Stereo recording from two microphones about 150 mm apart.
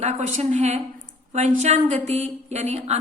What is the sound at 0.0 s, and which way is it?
A woman's voice, 50° right (ahead or behind).